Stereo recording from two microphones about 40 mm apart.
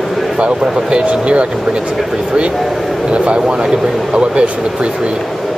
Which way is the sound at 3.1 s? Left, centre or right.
Right.